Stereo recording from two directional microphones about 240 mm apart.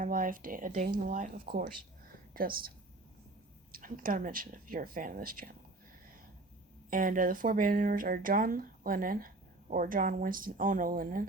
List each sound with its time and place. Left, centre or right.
0.0 s speech: right
6.9 s speech: right